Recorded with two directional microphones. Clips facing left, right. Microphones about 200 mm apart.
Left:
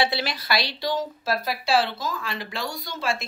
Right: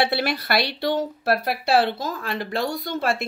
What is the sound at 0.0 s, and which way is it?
Speech, 60° right (ahead or behind).